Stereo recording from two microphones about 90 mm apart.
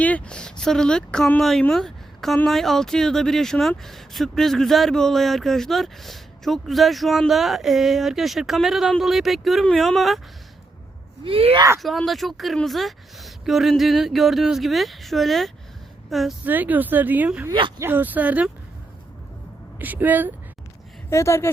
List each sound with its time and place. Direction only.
0.0 s speech: 15° left (ahead or behind)
1.7 s a sound: 5° left (ahead or behind)
2.5 s speech: 5° left (ahead or behind)
11.2 s speech: 90° right
11.8 s a woman's voice: centre (ahead or behind)
16.5 s speech: 20° right (ahead or behind)
19.8 s speech: 20° right (ahead or behind)
21.1 s speech: 30° left (ahead or behind)